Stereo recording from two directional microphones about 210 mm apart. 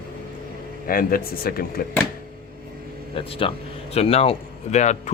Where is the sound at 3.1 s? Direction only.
25° left (ahead or behind).